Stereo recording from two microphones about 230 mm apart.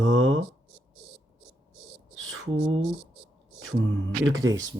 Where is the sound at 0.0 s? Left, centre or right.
Right.